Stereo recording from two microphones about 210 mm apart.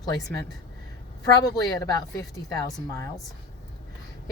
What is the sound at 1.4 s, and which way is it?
Speech, 15° left (ahead or behind).